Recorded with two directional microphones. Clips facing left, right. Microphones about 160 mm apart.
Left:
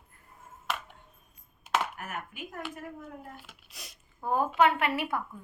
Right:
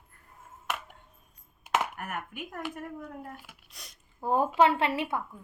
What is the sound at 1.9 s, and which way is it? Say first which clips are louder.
Speech: right 2 dB; 55° right (ahead or behind).